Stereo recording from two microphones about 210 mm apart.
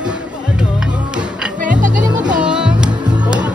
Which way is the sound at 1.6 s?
35° right (ahead or behind).